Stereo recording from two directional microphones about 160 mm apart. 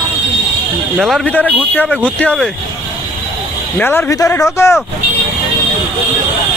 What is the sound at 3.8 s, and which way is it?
Speech, 10° left (ahead or behind).